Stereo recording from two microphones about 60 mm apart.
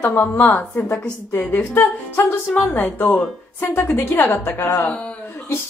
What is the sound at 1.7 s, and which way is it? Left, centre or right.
A woman's voice, left.